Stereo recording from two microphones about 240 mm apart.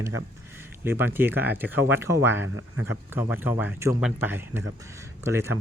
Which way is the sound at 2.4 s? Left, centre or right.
Right.